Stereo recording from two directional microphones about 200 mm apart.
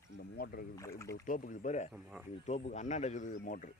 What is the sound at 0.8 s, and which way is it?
Speech, 15° left (ahead or behind).